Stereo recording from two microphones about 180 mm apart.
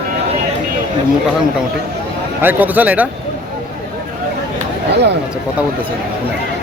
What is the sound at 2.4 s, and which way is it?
Speech, 10° right (ahead or behind).